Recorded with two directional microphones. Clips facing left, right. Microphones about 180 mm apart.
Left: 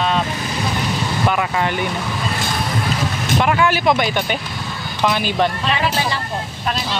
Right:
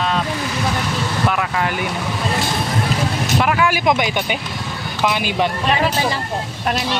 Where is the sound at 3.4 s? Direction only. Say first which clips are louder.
Left 2 dB; 5° right (ahead or behind).